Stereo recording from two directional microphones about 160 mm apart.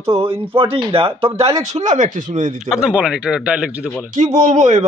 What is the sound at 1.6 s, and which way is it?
Speech, 50° right (ahead or behind).